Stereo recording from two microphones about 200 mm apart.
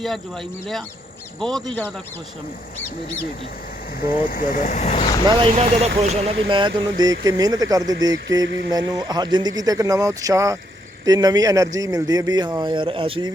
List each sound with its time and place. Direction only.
1.4 s a man's voice: centre (ahead or behind)
4.0 s speech: 45° left (ahead or behind)
5.2 s a man's voice: 30° right (ahead or behind)
8.4 s speech: 60° right (ahead or behind)
8.7 s a man's voice: 20° right (ahead or behind)